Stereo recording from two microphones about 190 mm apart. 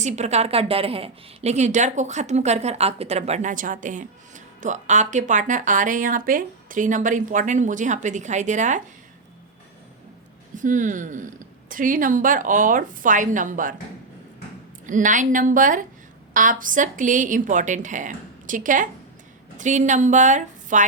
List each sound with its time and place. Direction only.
0.0 s a woman's voice: 35° right (ahead or behind)
10.6 s a woman's voice: 40° right (ahead or behind)
14.8 s a woman's voice: 40° right (ahead or behind)